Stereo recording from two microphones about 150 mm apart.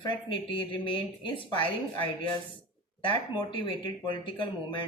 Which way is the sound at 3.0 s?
35° left (ahead or behind).